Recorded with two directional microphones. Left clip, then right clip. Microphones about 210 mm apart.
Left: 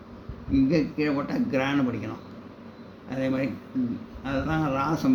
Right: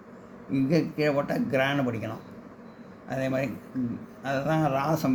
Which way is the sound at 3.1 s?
45° right (ahead or behind).